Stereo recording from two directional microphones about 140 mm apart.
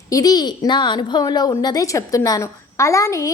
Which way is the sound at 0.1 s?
25° left (ahead or behind).